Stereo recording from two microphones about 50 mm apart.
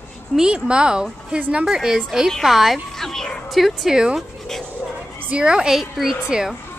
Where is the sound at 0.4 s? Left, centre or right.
Centre.